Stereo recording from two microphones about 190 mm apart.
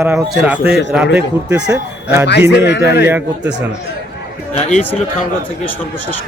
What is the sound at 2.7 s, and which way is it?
Speech, 60° left (ahead or behind).